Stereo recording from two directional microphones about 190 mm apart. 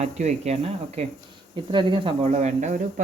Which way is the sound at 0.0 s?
35° right (ahead or behind).